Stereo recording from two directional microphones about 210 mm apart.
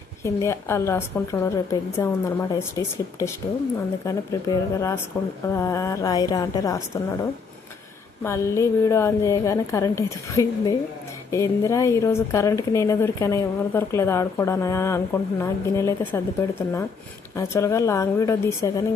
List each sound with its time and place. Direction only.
0.2 s a woman's voice: 15° left (ahead or behind)
8.2 s a woman's voice: 15° left (ahead or behind)